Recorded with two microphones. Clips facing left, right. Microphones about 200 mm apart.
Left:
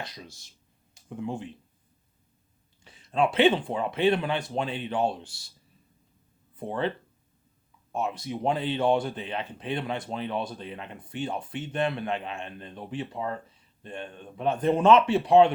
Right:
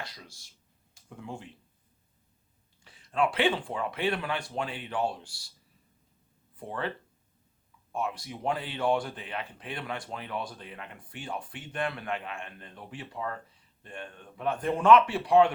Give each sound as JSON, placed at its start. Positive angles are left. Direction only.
{"t": 0.0, "sound": "speech", "side_deg": 20}
{"t": 2.8, "sound": "speech", "side_deg": 20}
{"t": 6.6, "sound": "speech", "side_deg": 25}
{"t": 7.9, "sound": "speech", "side_deg": 20}